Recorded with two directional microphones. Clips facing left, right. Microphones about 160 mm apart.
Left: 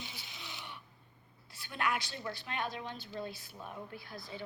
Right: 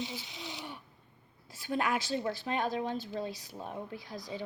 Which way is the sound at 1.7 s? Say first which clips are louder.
Right 5 dB; 40° right (ahead or behind).